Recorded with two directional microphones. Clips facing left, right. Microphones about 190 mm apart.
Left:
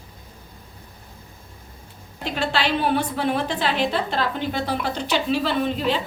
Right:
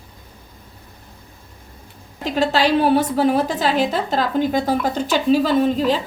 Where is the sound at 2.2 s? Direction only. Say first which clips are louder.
Right 6 dB; 40° right (ahead or behind).